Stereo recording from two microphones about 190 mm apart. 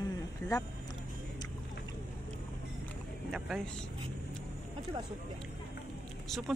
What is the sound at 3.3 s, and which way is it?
Speech, centre (ahead or behind).